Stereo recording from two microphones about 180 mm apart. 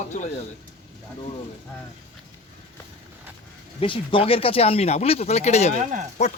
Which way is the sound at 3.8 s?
30° left (ahead or behind).